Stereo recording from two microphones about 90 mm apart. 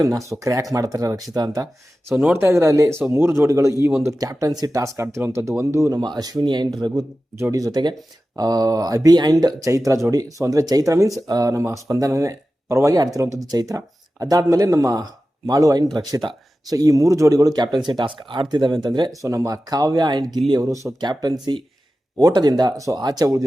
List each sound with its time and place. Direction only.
0.0 s speech: 35° right (ahead or behind)
2.3 s speech: 30° right (ahead or behind)
4.2 s speech: 40° right (ahead or behind)
6.0 s speech: 50° right (ahead or behind)
7.5 s speech: 40° right (ahead or behind)
15.9 s speech: 55° right (ahead or behind)